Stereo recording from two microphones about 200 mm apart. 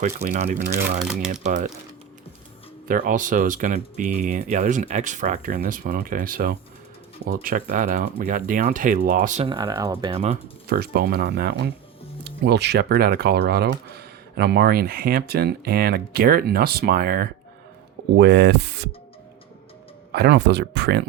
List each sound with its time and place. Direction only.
0.0 s speech: 35° right (ahead or behind)
2.8 s speech: 45° right (ahead or behind)
9.5 s speech: 20° right (ahead or behind)
10.7 s speech: 50° right (ahead or behind)
20.1 s speech: 60° right (ahead or behind)